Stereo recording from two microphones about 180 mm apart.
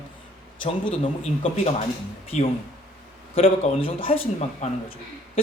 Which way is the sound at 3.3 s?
30° left (ahead or behind).